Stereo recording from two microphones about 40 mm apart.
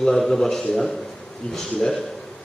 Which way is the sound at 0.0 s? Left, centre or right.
Centre.